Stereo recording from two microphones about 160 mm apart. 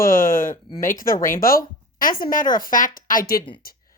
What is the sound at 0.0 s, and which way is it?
Speech, 60° left (ahead or behind).